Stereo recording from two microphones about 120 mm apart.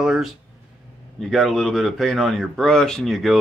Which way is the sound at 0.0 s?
Centre (ahead or behind).